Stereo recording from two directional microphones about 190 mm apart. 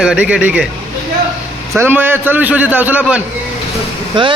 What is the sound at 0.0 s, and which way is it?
Speech, 5° right (ahead or behind).